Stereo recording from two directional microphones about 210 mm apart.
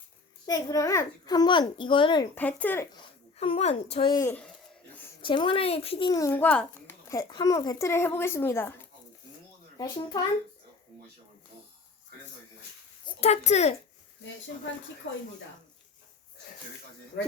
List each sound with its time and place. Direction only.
0.4 s a child's voice: 15° left (ahead or behind)
2.3 s a child's voice: 5° left (ahead or behind)
3.3 s a child's voice: 30° left (ahead or behind); by 4.5 s 10° left (ahead or behind)
5.2 s a child's voice: 25° left (ahead or behind)
9.7 s a child's voice: 20° left (ahead or behind)
13.1 s speech: 30° left (ahead or behind)
15.1 s speech: 60° left (ahead or behind)